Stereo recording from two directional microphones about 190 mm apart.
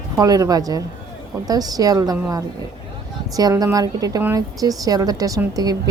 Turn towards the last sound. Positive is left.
turn(degrees=-20)  # may be behind; listen again after turning